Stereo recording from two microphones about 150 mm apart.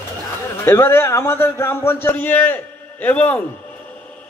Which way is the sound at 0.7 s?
15° left (ahead or behind).